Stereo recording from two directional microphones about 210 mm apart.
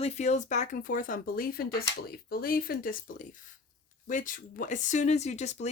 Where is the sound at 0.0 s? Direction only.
35° left (ahead or behind).